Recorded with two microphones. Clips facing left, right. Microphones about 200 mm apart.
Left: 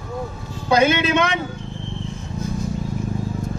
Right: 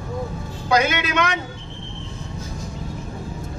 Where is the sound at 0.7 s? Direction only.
25° left (ahead or behind).